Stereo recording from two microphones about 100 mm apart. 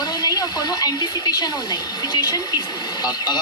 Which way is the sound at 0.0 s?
45° left (ahead or behind).